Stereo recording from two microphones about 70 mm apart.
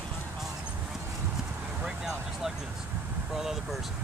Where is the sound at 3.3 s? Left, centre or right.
Centre.